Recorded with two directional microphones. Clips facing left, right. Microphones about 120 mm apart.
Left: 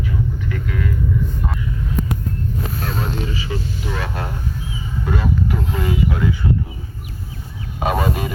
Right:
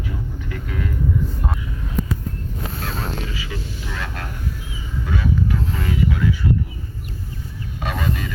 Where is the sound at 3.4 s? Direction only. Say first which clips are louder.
Left 5 dB; 30° left (ahead or behind).